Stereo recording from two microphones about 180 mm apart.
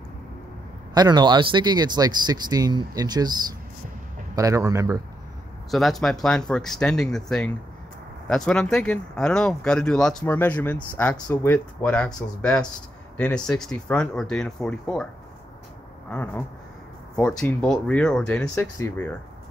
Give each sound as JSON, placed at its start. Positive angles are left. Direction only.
{"t": 0.9, "sound": "speech", "side_deg": -25}
{"t": 4.4, "sound": "speech", "side_deg": -20}
{"t": 5.7, "sound": "speech", "side_deg": 0}
{"t": 16.1, "sound": "speech", "side_deg": 10}